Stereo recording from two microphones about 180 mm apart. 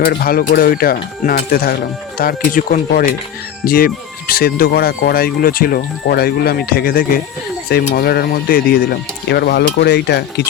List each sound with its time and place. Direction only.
0.0 s speech: 55° left (ahead or behind)